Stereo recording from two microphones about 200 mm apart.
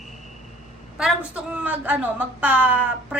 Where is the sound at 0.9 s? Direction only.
5° right (ahead or behind).